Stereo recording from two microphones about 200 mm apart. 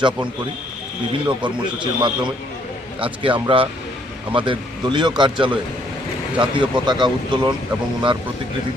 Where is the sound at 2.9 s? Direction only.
25° right (ahead or behind).